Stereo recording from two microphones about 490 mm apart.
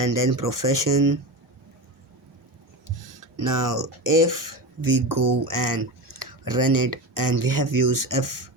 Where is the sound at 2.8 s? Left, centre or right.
Right.